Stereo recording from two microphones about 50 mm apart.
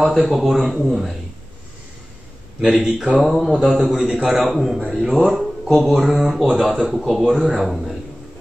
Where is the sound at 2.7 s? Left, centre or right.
Centre.